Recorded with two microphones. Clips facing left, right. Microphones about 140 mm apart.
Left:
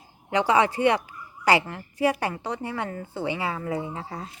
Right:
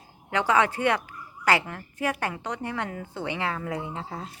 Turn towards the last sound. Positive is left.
turn(degrees=0)  # may be behind; listen again after turning